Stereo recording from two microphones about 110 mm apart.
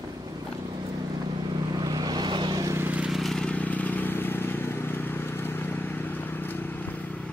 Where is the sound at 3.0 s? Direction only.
Centre (ahead or behind).